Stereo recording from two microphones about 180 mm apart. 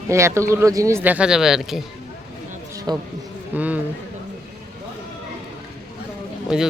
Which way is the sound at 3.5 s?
10° right (ahead or behind).